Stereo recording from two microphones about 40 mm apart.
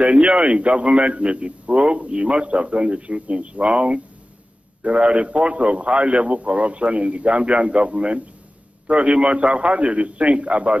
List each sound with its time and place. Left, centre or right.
0.0 s a man's voice: right